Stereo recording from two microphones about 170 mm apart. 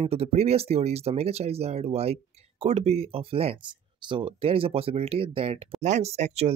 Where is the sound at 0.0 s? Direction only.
35° right (ahead or behind).